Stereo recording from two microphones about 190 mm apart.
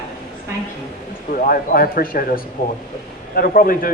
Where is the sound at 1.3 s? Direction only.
50° left (ahead or behind).